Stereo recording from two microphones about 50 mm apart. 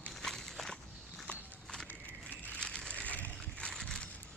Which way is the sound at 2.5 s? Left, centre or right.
Centre.